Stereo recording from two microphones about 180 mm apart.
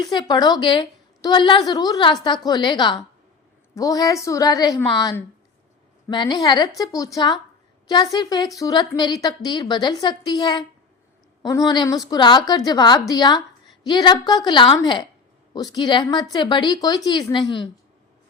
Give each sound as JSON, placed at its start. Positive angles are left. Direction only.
{"t": 0.0, "sound": "a woman's voice", "side_deg": 25}
{"t": 6.1, "sound": "a woman's voice", "side_deg": 25}